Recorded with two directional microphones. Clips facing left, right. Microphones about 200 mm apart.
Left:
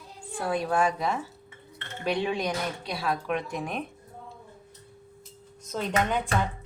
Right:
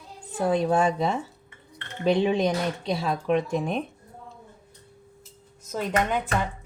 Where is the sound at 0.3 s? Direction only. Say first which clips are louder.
Right 4 dB; 20° right (ahead or behind).